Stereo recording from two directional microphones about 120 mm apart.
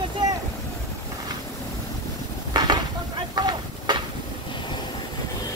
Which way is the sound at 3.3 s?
35° right (ahead or behind).